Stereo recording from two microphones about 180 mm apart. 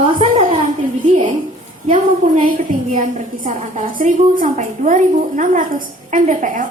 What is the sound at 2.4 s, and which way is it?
A woman's voice, 45° right (ahead or behind).